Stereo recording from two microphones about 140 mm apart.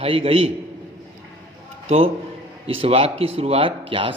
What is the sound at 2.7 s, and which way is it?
Speech, 45° right (ahead or behind).